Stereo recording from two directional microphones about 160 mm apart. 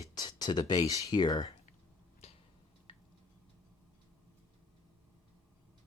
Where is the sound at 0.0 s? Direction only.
25° left (ahead or behind).